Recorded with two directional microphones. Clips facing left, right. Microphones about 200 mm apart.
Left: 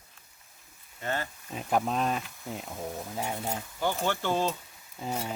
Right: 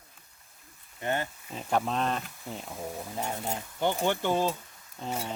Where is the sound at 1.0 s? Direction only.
20° right (ahead or behind).